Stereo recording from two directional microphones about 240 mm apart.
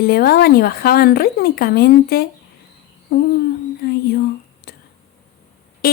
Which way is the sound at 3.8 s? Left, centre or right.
Left.